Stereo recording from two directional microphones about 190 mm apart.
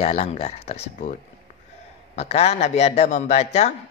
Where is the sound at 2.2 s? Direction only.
35° left (ahead or behind).